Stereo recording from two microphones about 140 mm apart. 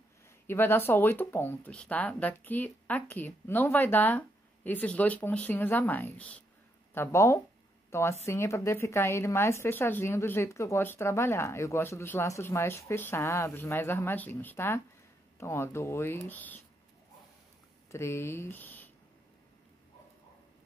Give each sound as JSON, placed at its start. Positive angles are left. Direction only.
{"t": 0.5, "sound": "a woman's voice", "side_deg": 15}
{"t": 17.9, "sound": "speech", "side_deg": 20}